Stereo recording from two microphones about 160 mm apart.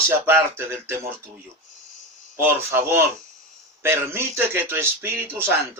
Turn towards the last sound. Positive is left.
turn(degrees=-15)  # may be behind; listen again after turning